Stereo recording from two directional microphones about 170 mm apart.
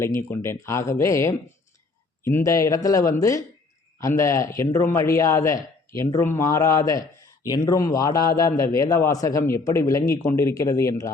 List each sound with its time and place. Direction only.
0.0 s a man's voice: 15° left (ahead or behind)